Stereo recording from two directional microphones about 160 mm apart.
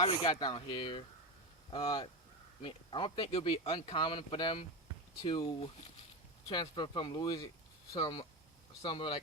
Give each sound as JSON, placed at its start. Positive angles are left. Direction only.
{"t": 0.0, "sound": "speech", "side_deg": 30}
{"t": 2.6, "sound": "speech", "side_deg": 30}
{"t": 5.5, "sound": "speech", "side_deg": 40}
{"t": 6.5, "sound": "speech", "side_deg": 30}